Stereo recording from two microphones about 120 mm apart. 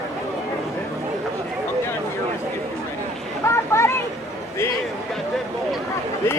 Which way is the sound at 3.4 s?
20° left (ahead or behind).